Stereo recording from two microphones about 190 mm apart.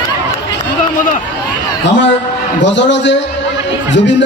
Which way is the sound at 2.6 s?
70° left (ahead or behind).